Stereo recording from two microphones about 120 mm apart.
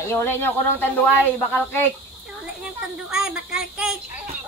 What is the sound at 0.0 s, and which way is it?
Speech, 20° left (ahead or behind).